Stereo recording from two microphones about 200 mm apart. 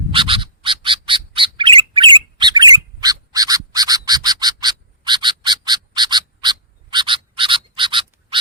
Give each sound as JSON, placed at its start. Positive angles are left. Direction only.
{"t": 0.1, "sound": "bird", "side_deg": -25}